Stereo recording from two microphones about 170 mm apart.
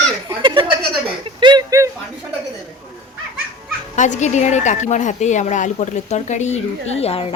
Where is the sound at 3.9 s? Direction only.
45° left (ahead or behind).